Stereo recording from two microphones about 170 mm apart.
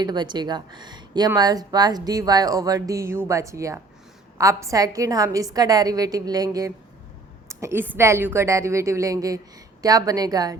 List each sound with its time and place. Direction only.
0.0 s a woman's voice: 25° right (ahead or behind)